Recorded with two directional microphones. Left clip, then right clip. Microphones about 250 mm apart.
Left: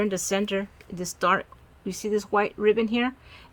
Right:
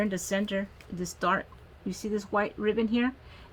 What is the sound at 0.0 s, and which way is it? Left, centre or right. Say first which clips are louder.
Speech: left 4 dB; left.